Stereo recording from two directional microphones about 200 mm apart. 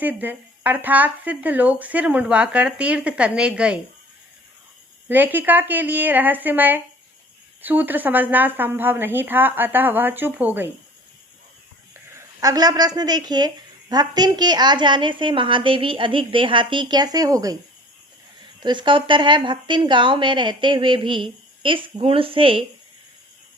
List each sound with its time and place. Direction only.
0.0 s speech: 10° right (ahead or behind)
5.0 s speech: 10° right (ahead or behind)
12.1 s a woman's voice: 15° right (ahead or behind)
18.6 s a woman's voice: 25° right (ahead or behind)